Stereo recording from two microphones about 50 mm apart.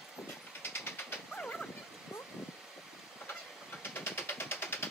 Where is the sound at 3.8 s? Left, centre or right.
Left.